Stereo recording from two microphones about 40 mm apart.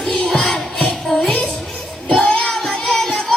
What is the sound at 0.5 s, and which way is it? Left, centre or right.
Music, centre.